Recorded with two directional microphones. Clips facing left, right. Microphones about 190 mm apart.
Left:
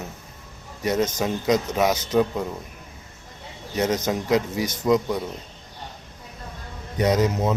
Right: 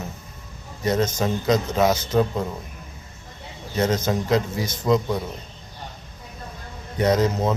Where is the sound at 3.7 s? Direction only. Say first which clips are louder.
Right 1 dB; 15° left (ahead or behind).